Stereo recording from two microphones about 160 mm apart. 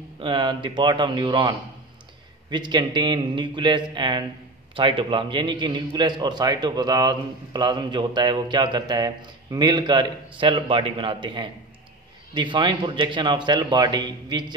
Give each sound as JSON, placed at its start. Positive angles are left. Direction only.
{"t": 0.2, "sound": "a man's voice", "side_deg": -30}
{"t": 2.5, "sound": "a man's voice", "side_deg": -30}